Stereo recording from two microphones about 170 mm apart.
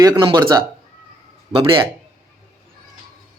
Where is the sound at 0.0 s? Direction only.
25° right (ahead or behind).